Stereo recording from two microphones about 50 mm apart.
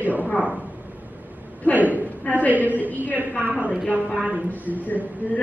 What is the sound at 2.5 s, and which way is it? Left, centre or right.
A woman's voice, right.